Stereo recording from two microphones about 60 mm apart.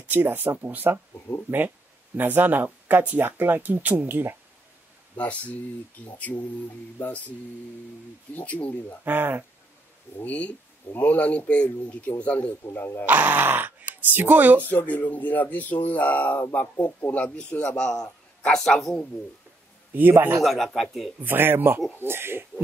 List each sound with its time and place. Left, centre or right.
0.0 s speech: right
2.1 s speech: right
5.1 s speech: left
6.3 s a man's voice: centre
8.4 s speech: left
9.0 s speech: right
10.2 s speech: left
12.7 s speech: left
13.0 s speech: right
14.6 s a man's voice: left; by 18.9 s centre
19.9 s speech: right
20.4 s speech: centre
21.2 s speech: right